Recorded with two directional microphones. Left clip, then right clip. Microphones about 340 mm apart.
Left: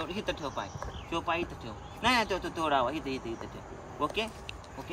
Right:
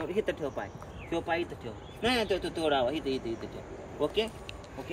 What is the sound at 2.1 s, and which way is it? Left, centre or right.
Speech, centre.